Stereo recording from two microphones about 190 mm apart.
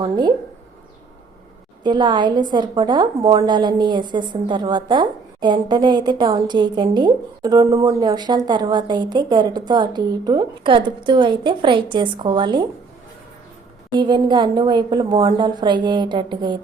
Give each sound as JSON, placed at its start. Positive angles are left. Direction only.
{"t": 0.0, "sound": "a woman's voice", "side_deg": -20}
{"t": 1.8, "sound": "a woman's voice", "side_deg": -25}
{"t": 14.0, "sound": "a woman's voice", "side_deg": -25}